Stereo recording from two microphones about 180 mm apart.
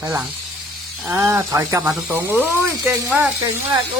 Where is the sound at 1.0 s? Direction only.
15° right (ahead or behind).